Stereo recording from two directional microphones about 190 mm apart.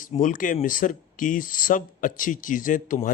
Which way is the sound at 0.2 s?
45° left (ahead or behind).